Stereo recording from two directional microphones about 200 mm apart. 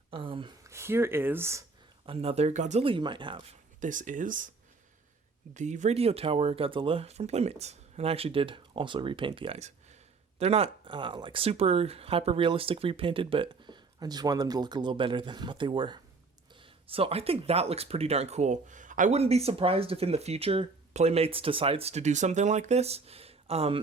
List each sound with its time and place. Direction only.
0.1 s speech: 25° right (ahead or behind)
2.0 s speech: 30° right (ahead or behind)
3.8 s speech: 40° right (ahead or behind)
5.5 s speech: 35° right (ahead or behind)